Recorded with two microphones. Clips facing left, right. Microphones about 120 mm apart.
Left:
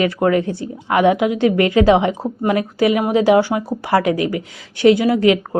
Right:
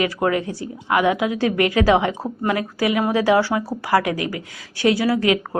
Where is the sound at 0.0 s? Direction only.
35° left (ahead or behind).